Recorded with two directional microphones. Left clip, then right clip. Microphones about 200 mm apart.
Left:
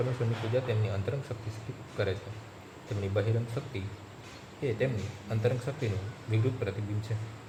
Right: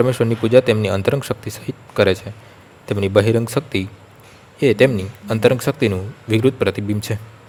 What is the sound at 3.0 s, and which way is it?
Speech, 55° right (ahead or behind).